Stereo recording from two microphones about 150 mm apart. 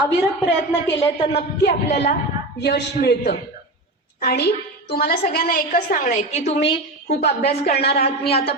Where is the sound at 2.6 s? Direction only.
90° left.